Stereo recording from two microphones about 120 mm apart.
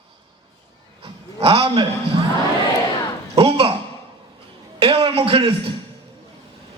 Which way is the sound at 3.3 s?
55° right (ahead or behind).